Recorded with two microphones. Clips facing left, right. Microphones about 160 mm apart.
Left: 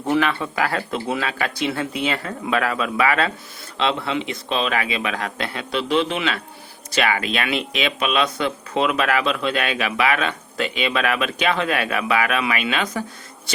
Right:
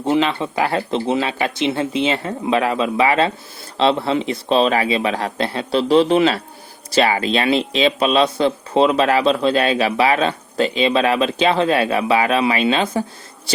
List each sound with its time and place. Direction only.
0.0 s speech: 20° right (ahead or behind)